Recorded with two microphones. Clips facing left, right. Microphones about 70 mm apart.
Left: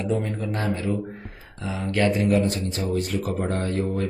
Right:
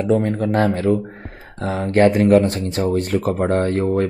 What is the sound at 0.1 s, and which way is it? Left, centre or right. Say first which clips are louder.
Speech: right 11 dB; right.